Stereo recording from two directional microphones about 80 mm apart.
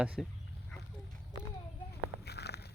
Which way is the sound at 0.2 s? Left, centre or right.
Centre.